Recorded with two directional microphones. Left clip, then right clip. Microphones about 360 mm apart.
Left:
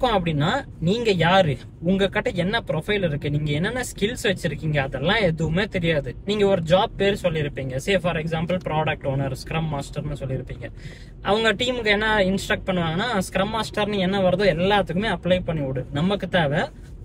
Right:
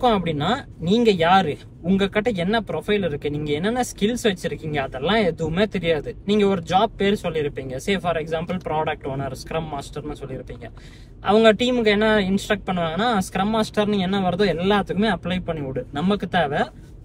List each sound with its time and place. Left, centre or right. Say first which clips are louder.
0.0 s speech: right 1 dB; centre
11.4 s speech: right 5 dB; centre